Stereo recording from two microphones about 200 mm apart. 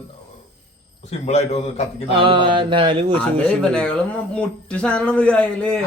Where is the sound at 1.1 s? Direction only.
30° left (ahead or behind).